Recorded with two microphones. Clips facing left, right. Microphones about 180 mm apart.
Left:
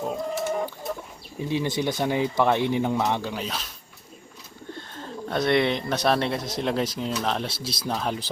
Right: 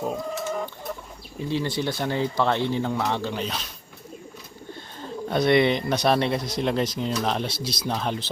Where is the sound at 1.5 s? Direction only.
15° left (ahead or behind).